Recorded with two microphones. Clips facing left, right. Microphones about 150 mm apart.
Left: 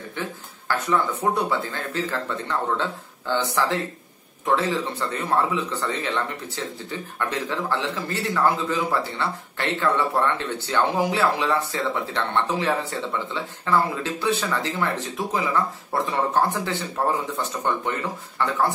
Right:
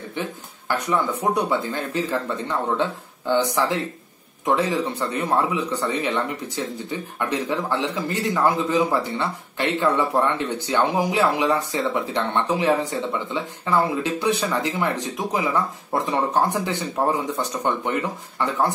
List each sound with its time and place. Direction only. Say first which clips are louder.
0.2 s a man's voice: right 3 dB; 20° right (ahead or behind)